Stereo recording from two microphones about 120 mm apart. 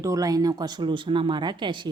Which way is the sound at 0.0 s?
30° right (ahead or behind).